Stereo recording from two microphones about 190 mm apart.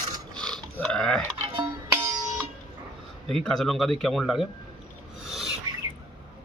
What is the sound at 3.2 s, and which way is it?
Speech, centre (ahead or behind).